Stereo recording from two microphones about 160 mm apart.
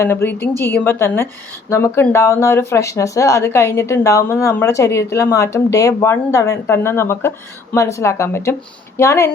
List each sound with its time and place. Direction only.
0.0 s speech: 15° left (ahead or behind)